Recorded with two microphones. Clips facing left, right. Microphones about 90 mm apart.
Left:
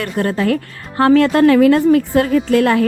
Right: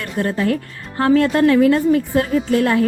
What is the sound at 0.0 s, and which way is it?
A woman's voice, 90° left.